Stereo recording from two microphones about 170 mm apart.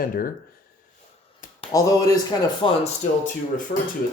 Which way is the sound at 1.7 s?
20° left (ahead or behind).